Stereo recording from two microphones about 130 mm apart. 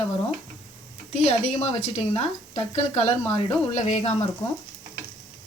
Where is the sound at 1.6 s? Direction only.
50° left (ahead or behind).